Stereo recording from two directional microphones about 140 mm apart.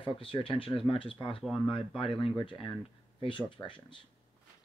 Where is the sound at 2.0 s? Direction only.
40° left (ahead or behind).